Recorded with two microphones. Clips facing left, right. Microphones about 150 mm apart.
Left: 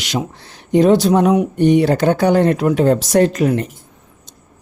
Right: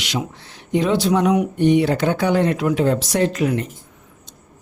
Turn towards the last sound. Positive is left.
turn(degrees=40)  # may be behind; listen again after turning